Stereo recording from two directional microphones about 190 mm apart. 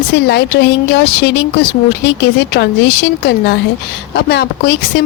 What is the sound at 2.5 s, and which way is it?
Speech, 60° left (ahead or behind).